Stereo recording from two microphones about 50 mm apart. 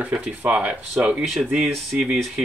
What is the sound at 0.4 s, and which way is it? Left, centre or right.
Speech, right.